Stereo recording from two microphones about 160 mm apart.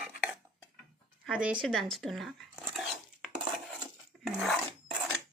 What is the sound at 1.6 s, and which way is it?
Speech, centre (ahead or behind).